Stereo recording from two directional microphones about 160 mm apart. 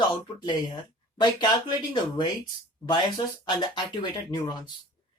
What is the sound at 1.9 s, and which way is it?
Speech, 25° left (ahead or behind).